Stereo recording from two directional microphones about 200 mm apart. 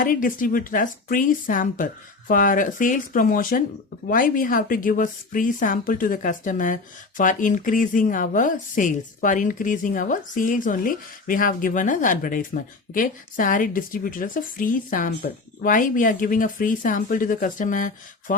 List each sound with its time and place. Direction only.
0.0 s a woman's voice: 45° left (ahead or behind)